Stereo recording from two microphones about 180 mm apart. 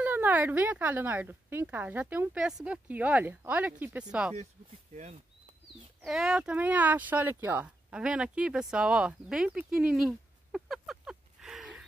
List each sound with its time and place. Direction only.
0.0 s speech: 10° right (ahead or behind)
4.9 s a sound: 40° right (ahead or behind)
6.0 s speech: 5° right (ahead or behind)